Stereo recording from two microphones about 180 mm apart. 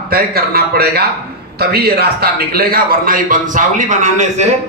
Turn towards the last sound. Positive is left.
turn(degrees=-40)  # may be behind; listen again after turning